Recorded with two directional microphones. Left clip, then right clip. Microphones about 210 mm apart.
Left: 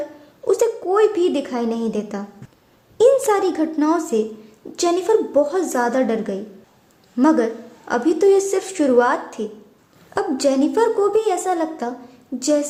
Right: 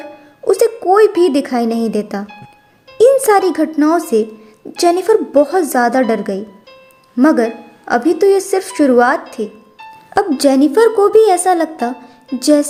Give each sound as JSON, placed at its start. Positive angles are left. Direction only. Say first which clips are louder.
{"t": 0.4, "sound": "a woman's voice", "louder": "right 6 dB", "side_deg": -25}